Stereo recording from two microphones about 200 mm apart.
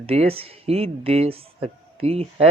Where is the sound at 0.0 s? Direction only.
30° right (ahead or behind).